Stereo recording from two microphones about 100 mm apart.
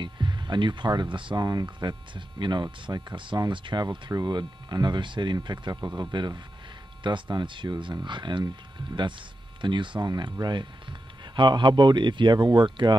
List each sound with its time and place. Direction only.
0.0 s speech: 50° right (ahead or behind)
3.8 s speech: 40° right (ahead or behind)
9.6 s speech: 50° right (ahead or behind)